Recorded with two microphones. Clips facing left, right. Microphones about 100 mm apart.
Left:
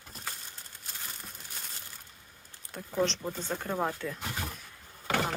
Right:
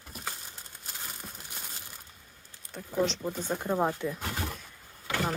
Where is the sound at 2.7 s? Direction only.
5° right (ahead or behind).